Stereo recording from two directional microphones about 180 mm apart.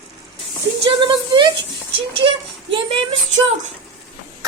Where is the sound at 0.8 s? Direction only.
30° right (ahead or behind).